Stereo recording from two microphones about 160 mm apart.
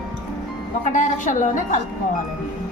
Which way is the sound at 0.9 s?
50° left (ahead or behind).